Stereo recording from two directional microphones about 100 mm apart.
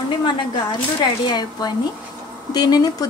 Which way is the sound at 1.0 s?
45° left (ahead or behind).